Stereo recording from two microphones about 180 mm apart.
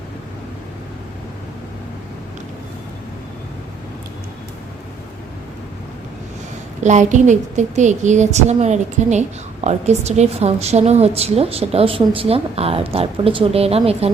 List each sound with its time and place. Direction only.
6.8 s a woman's voice: 40° right (ahead or behind)